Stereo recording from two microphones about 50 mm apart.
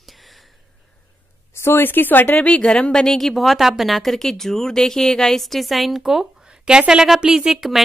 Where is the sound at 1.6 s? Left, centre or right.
Left.